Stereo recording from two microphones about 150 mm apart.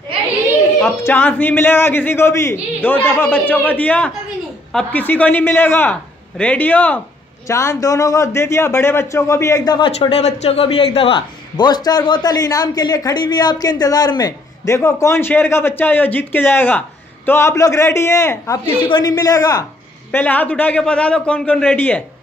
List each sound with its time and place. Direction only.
0.8 s a man's voice: 15° left (ahead or behind)
9.9 s a man's voice: 45° left (ahead or behind); by 18.6 s 20° left (ahead or behind)
18.7 s a man's voice: 35° left (ahead or behind)
20.1 s a man's voice: 10° left (ahead or behind)